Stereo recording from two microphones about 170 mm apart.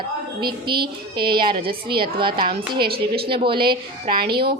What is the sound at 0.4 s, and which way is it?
A woman's voice, 25° right (ahead or behind).